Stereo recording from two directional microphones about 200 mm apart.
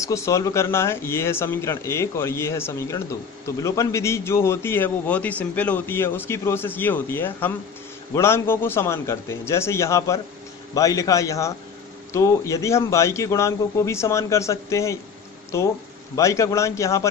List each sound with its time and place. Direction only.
0.0 s speech: 15° left (ahead or behind)